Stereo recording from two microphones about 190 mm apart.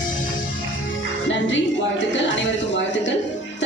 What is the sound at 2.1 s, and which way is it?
Speech, 75° left (ahead or behind).